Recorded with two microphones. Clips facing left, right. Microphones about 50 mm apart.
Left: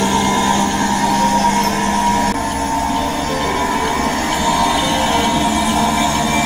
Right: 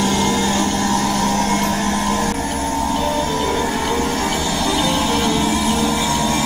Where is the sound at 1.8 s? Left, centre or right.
Left.